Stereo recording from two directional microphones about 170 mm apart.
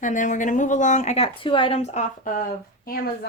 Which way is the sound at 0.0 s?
50° left (ahead or behind).